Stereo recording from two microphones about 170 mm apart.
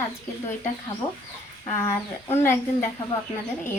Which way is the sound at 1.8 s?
15° left (ahead or behind).